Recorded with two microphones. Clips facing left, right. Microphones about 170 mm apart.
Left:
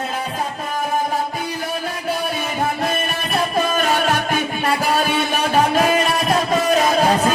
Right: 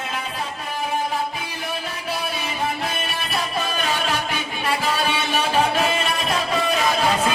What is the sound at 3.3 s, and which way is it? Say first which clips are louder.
Music: left 7 dB; 45° left (ahead or behind).